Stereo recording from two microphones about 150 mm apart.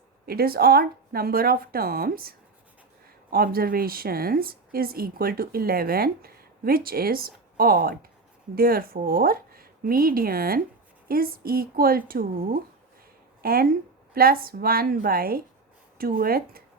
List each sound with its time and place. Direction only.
0.3 s speech: 90° right
3.2 s a woman's voice: 75° right (ahead or behind)
13.4 s a woman's voice: 85° right